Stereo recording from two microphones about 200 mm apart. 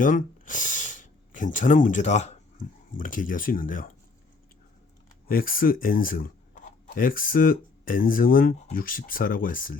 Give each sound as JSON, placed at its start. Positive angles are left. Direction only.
{"t": 0.0, "sound": "speech", "side_deg": 40}
{"t": 5.3, "sound": "speech", "side_deg": 45}